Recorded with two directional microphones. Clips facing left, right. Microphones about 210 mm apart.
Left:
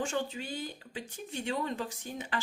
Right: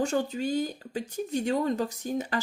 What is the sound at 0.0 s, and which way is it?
Speech, 40° right (ahead or behind).